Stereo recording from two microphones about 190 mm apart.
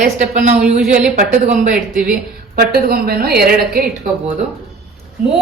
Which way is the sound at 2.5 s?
50° right (ahead or behind).